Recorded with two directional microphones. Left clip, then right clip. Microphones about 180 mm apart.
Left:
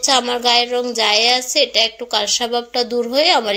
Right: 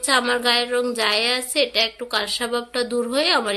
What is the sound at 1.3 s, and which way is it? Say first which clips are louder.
Speech: left 5 dB; 35° right (ahead or behind).